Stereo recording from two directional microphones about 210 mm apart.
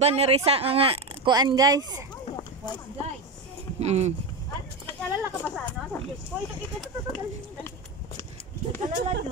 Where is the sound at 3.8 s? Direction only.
30° right (ahead or behind).